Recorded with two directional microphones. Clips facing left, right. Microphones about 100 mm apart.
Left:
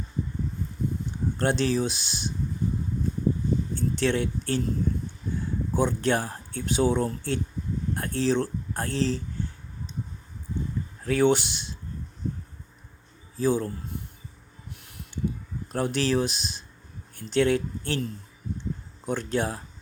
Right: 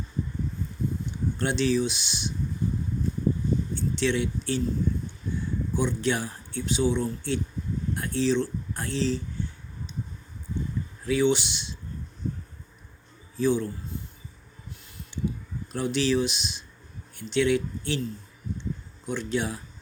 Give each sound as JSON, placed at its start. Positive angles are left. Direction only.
{"t": 1.4, "sound": "speech", "side_deg": 45}
{"t": 3.8, "sound": "speech", "side_deg": 45}
{"t": 5.7, "sound": "speech", "side_deg": 45}
{"t": 11.0, "sound": "speech", "side_deg": 50}
{"t": 13.3, "sound": "speech", "side_deg": 40}
{"t": 14.8, "sound": "a sound", "side_deg": 65}
{"t": 15.7, "sound": "speech", "side_deg": 45}
{"t": 19.0, "sound": "speech", "side_deg": 45}